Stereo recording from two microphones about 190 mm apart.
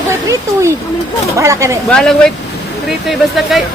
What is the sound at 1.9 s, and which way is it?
Speech, 5° left (ahead or behind).